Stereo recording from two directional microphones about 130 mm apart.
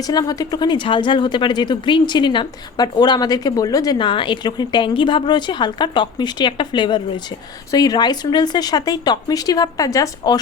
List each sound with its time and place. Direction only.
0.0 s speech: 30° left (ahead or behind)